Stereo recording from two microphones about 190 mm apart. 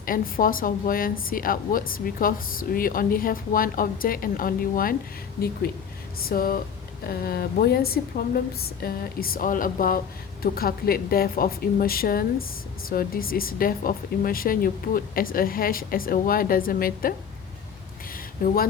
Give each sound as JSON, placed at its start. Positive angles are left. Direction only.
{"t": 0.0, "sound": "a woman's voice", "side_deg": 50}
{"t": 6.2, "sound": "a woman's voice", "side_deg": 50}
{"t": 18.4, "sound": "a woman's voice", "side_deg": 50}